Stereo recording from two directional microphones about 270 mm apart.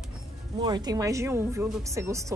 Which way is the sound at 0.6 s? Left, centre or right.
Centre.